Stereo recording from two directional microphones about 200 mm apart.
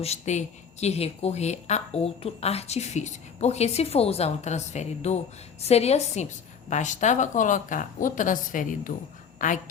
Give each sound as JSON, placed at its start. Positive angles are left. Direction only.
{"t": 0.0, "sound": "speech", "side_deg": 35}